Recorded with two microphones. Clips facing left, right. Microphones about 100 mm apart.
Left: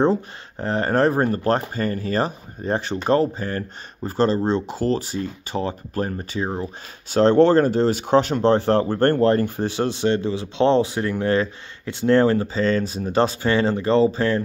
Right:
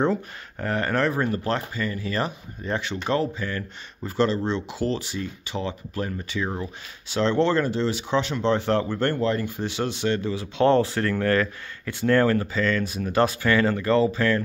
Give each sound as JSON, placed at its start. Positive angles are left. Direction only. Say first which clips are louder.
{"t": 0.0, "sound": "speech", "louder": "left 4 dB", "side_deg": 30}